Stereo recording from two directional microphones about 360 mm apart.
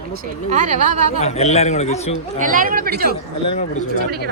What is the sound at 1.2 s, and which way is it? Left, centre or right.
Speech, centre.